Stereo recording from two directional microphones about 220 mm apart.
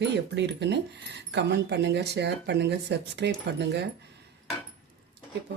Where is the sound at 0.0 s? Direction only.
50° right (ahead or behind).